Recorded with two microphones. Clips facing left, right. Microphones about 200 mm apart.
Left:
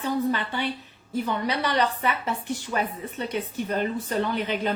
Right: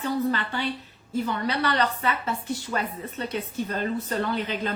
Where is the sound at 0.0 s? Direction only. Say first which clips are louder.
Even; 15° left (ahead or behind).